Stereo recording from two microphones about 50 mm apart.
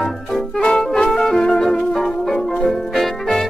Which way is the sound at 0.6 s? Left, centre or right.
Centre.